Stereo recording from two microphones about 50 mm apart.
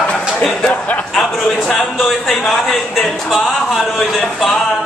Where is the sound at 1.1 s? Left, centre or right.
Centre.